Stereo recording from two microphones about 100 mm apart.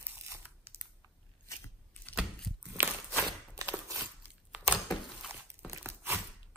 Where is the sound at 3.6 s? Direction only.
35° right (ahead or behind).